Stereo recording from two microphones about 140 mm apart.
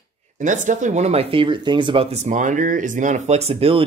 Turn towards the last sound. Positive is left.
turn(degrees=-45)  # may be behind; listen again after turning